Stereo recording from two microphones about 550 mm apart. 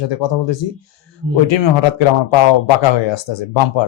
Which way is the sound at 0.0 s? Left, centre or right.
Left.